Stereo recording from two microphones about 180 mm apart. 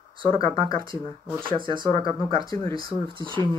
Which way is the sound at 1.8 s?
20° left (ahead or behind).